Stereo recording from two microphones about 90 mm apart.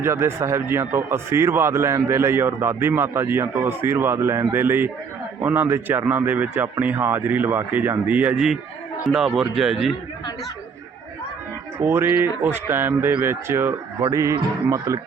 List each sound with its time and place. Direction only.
0.0 s a man's voice: 30° right (ahead or behind)
9.1 s a man's voice: 5° right (ahead or behind)
11.8 s a man's voice: 25° right (ahead or behind)